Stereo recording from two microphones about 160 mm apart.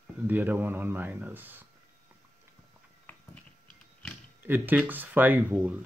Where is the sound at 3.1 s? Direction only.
10° left (ahead or behind).